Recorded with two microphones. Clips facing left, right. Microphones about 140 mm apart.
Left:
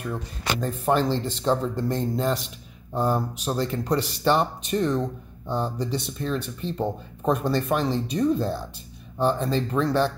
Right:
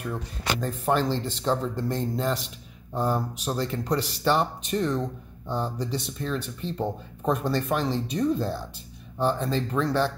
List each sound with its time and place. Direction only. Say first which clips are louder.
0.1 s speech: left 1 dB; 15° left (ahead or behind)